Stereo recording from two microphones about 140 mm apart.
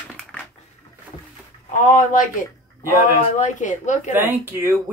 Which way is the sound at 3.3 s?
60° left (ahead or behind).